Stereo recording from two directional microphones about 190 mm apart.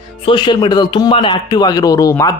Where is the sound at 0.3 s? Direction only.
25° left (ahead or behind).